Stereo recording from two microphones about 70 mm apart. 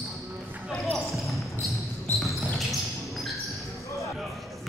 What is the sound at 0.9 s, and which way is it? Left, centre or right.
Basketball bounce, centre.